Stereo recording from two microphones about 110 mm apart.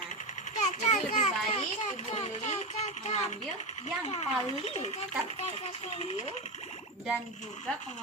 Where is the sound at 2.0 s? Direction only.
75° left (ahead or behind).